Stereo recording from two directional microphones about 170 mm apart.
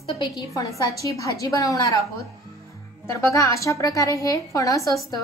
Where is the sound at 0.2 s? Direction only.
20° left (ahead or behind).